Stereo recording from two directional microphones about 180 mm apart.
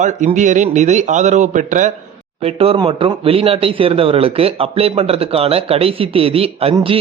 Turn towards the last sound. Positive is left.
turn(degrees=-30)  # may be behind; listen again after turning